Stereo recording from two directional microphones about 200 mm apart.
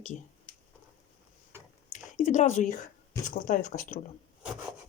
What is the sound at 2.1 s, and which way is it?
Speech, 35° left (ahead or behind).